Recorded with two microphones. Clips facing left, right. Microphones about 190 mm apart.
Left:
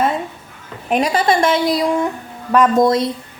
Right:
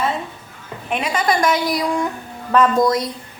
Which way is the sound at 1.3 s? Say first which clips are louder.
Left 1 dB; 25° left (ahead or behind).